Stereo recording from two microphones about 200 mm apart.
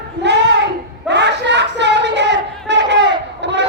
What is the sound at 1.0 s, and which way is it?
Battle cry, 60° right (ahead or behind).